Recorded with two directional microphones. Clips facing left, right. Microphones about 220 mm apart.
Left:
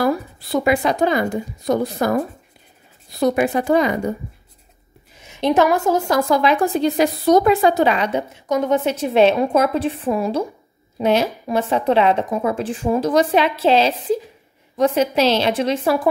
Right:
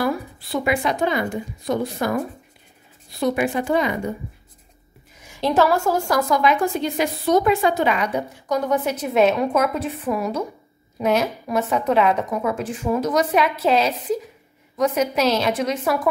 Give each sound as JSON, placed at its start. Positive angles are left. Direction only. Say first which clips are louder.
{"t": 0.0, "sound": "a woman's voice", "louder": "left 4 dB", "side_deg": 35}
{"t": 5.2, "sound": "a woman's voice", "louder": "left 2 dB", "side_deg": 20}